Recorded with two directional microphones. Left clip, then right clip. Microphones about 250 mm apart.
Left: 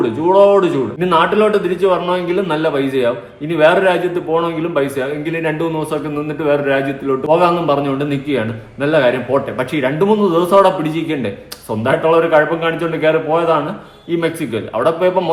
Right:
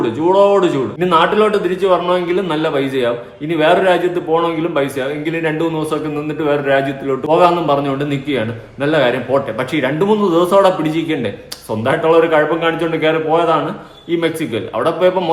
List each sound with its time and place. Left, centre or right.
0.0 s a man's voice: centre